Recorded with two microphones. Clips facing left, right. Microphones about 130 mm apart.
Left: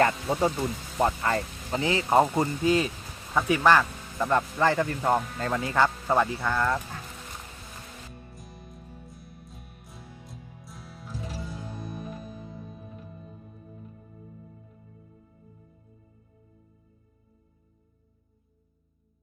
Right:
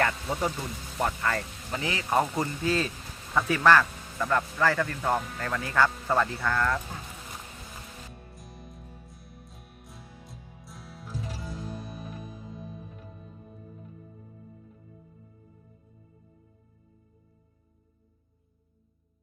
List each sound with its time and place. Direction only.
0.0 s speech: 30° left (ahead or behind)
8.1 s music: centre (ahead or behind)